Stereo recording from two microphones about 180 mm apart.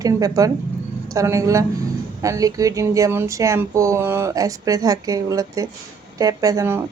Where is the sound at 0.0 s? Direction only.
20° right (ahead or behind).